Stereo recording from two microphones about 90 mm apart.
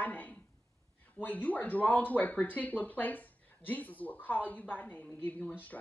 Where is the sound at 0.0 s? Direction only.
20° left (ahead or behind).